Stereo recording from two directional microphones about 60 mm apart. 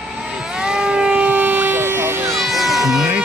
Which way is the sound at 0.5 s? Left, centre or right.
Centre.